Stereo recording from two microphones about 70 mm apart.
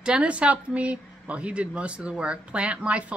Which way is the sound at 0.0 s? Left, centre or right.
Centre.